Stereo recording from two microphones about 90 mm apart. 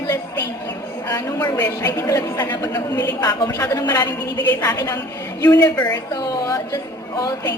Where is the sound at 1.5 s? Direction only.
45° left (ahead or behind).